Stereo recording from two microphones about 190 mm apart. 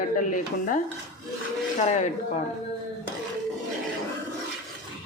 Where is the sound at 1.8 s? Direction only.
40° left (ahead or behind).